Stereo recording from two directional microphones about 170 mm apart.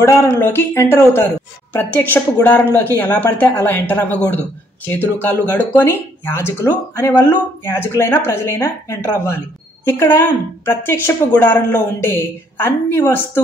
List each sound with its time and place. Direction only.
0.0 s speech: 15° left (ahead or behind)